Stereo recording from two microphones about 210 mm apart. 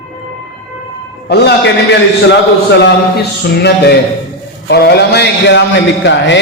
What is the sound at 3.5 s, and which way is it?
A man's voice, 50° left (ahead or behind).